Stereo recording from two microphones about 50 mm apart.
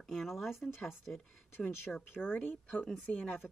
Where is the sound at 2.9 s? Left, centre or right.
Left.